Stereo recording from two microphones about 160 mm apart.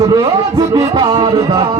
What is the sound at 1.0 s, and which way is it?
Music, 35° right (ahead or behind).